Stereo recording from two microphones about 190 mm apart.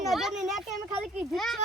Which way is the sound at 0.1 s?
Centre (ahead or behind).